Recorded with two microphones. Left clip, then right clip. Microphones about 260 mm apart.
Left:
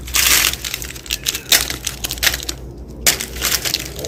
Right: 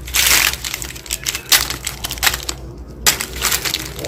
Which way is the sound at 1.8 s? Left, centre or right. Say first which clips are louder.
Even; centre.